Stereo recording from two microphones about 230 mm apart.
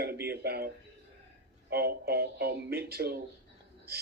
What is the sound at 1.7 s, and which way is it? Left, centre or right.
Speech, right.